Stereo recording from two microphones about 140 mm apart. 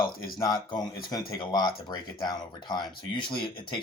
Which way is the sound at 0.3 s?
30° left (ahead or behind).